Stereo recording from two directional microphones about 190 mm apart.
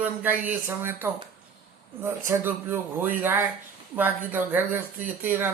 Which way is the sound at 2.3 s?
10° right (ahead or behind).